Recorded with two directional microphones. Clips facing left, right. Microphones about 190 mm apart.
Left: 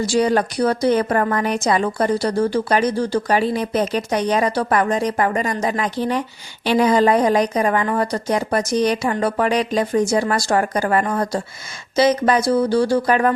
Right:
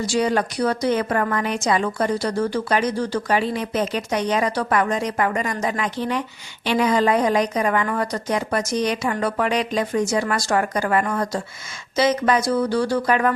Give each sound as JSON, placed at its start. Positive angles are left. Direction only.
{"t": 0.1, "sound": "a woman's voice", "side_deg": 35}